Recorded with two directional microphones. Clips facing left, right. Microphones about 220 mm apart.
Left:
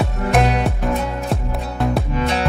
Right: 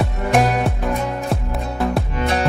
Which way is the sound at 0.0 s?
Centre (ahead or behind).